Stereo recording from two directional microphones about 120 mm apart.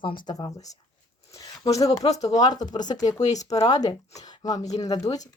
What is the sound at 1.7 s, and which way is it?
Speech, 30° left (ahead or behind).